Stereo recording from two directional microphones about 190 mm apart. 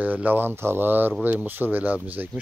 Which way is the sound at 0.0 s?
10° right (ahead or behind).